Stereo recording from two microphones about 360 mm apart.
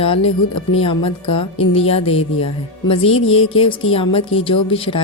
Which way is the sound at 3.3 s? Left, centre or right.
Centre.